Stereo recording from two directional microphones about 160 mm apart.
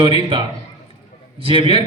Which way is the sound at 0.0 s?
30° right (ahead or behind).